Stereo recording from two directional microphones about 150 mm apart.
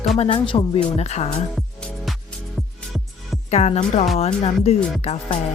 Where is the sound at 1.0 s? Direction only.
45° left (ahead or behind).